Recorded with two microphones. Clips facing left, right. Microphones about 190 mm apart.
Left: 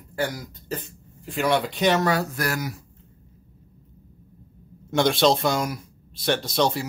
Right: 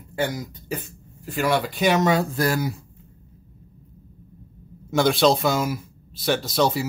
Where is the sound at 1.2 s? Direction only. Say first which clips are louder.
Even; centre (ahead or behind).